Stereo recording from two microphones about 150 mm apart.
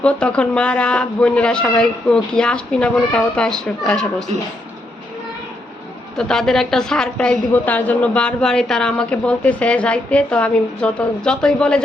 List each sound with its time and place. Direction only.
0.0 s a woman's voice: 5° left (ahead or behind)
6.1 s a woman's voice: 5° left (ahead or behind)